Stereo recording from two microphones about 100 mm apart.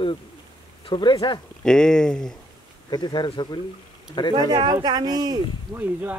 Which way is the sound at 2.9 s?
45° left (ahead or behind).